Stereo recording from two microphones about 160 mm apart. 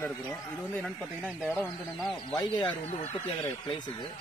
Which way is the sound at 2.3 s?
30° left (ahead or behind).